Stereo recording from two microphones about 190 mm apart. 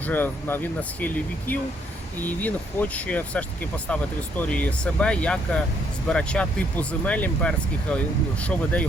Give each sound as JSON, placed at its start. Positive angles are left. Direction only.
{"t": 0.0, "sound": "speech", "side_deg": 10}